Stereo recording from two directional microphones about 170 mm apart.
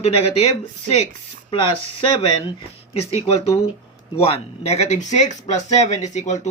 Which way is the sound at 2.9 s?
35° left (ahead or behind).